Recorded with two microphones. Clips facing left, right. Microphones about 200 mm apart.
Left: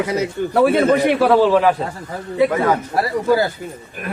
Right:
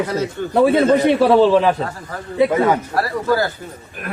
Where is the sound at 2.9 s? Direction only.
15° left (ahead or behind).